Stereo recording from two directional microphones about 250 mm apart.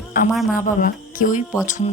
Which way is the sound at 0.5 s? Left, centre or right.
Left.